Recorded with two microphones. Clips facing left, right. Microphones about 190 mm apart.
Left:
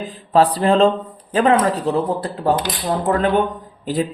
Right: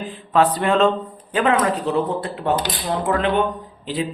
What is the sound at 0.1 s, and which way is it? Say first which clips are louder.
Speech: left 2 dB; 35° left (ahead or behind).